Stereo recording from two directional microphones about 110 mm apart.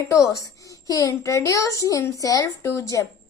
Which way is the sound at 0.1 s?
30° left (ahead or behind).